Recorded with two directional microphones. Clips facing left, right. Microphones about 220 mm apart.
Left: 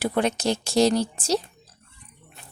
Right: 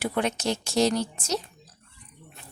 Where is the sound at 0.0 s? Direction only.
35° left (ahead or behind).